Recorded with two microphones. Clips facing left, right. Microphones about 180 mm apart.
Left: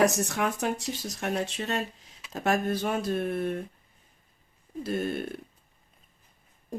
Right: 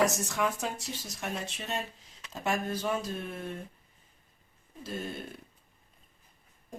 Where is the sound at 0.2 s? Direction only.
60° left (ahead or behind).